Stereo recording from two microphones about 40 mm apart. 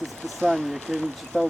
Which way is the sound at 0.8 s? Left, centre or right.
Centre.